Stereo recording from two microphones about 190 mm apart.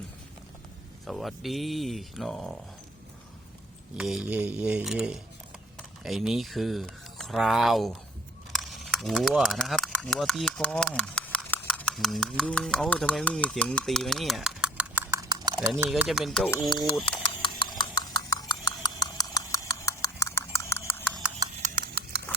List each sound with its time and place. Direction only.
1.0 s speech: centre (ahead or behind)
3.9 s speech: 5° right (ahead or behind); by 15.5 s 20° right (ahead or behind)
15.9 s speech: centre (ahead or behind)
16.6 s speech: 25° left (ahead or behind)
17.4 s a sound: 25° left (ahead or behind)
21.6 s patter: 55° right (ahead or behind)